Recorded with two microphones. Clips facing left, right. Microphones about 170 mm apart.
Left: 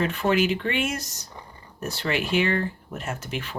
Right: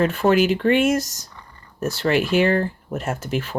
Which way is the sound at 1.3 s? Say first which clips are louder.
Left 2 dB; 20° left (ahead or behind).